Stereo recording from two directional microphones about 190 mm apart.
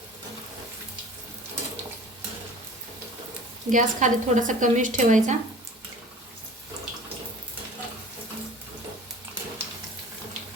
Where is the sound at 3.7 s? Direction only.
40° right (ahead or behind).